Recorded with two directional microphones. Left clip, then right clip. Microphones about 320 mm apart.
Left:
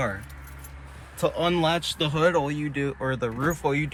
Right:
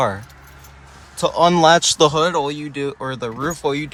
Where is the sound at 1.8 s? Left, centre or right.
Right.